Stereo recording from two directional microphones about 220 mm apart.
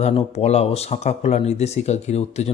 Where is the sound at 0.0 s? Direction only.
30° left (ahead or behind).